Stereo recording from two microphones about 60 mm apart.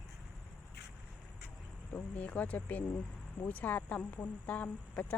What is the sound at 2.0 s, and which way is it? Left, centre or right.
A woman's voice, left.